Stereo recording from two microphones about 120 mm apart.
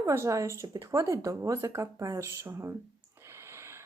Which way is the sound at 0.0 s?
25° right (ahead or behind).